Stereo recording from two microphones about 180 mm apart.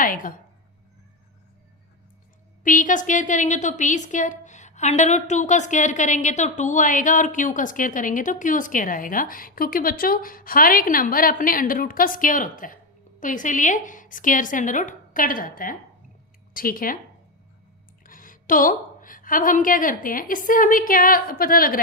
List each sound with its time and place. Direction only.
0.0 s a woman's voice: 50° left (ahead or behind)
2.6 s a woman's voice: 45° left (ahead or behind)
18.0 s a woman's voice: 50° left (ahead or behind)